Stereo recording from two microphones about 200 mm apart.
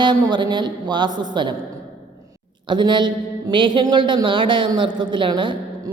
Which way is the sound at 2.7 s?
20° right (ahead or behind).